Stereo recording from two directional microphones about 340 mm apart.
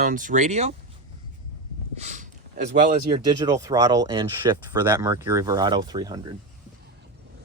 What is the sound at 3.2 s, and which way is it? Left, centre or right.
Speech, centre.